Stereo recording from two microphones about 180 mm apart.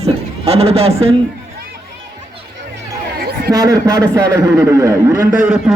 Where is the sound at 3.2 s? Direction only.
55° right (ahead or behind).